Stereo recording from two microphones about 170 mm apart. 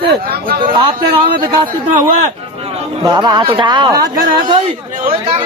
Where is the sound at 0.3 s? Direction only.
60° right (ahead or behind).